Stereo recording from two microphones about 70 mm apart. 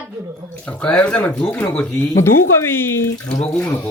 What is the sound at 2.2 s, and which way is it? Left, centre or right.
Speech, left.